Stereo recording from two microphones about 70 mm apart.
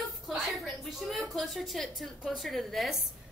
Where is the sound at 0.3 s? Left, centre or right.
Centre.